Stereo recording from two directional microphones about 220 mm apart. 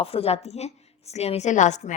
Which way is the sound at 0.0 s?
25° left (ahead or behind).